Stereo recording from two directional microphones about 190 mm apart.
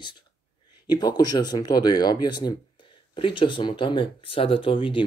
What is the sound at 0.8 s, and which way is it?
Speech, 20° left (ahead or behind).